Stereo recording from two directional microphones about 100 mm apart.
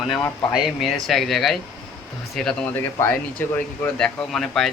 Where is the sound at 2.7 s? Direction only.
25° left (ahead or behind).